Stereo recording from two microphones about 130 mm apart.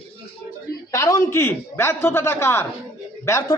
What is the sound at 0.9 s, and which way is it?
A man's voice, 25° left (ahead or behind).